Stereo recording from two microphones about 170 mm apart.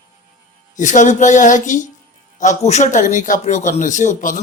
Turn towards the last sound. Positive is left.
turn(degrees=50)  # may be behind; listen again after turning